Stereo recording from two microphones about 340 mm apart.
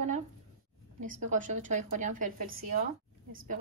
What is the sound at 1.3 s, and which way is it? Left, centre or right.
A woman's voice, right.